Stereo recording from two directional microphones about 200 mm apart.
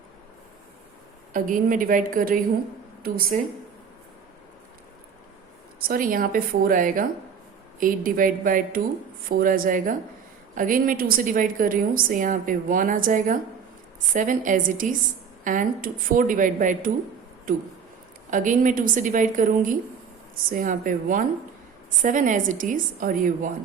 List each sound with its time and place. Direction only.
1.3 s a woman's voice: 40° right (ahead or behind)
5.8 s a woman's voice: 45° right (ahead or behind)
18.3 s a woman's voice: 40° right (ahead or behind)